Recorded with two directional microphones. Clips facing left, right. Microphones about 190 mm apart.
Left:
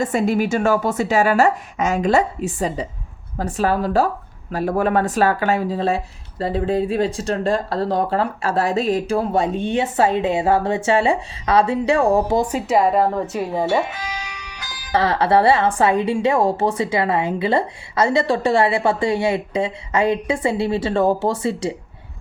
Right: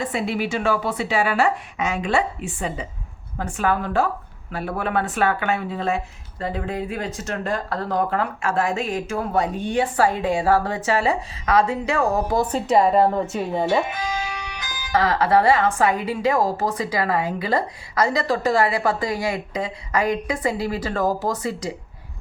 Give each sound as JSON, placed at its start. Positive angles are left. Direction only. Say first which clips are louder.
{"t": 0.0, "sound": "a woman's voice", "louder": "left 6 dB", "side_deg": 45}
{"t": 12.4, "sound": "speech", "louder": "left 1 dB", "side_deg": 10}
{"t": 14.9, "sound": "a woman's voice", "louder": "left 2 dB", "side_deg": 30}